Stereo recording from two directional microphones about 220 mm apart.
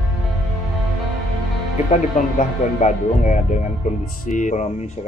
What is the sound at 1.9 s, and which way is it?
Speech, 35° left (ahead or behind).